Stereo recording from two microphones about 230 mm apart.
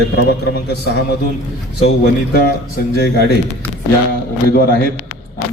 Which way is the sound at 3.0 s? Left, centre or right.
Left.